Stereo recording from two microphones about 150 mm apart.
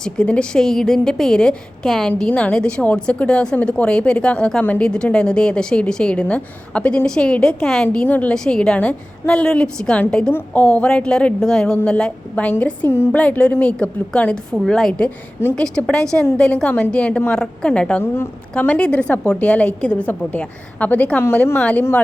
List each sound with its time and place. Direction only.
0.0 s a woman's voice: 5° left (ahead or behind)